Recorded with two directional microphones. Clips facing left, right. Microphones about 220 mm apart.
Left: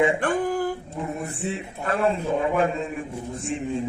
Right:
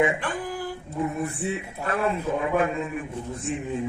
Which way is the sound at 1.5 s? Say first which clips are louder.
Left 1 dB; 30° left (ahead or behind).